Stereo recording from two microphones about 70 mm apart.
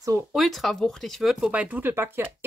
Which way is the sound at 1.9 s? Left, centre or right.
Right.